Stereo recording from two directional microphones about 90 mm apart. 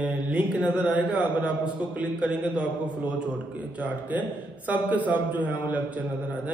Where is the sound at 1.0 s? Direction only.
15° right (ahead or behind).